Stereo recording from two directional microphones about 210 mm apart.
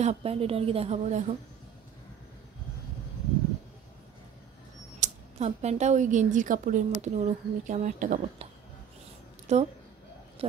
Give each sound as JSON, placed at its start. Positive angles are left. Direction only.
{"t": 0.0, "sound": "a woman's voice", "side_deg": -30}
{"t": 5.0, "sound": "speech", "side_deg": -30}
{"t": 9.5, "sound": "speech", "side_deg": -30}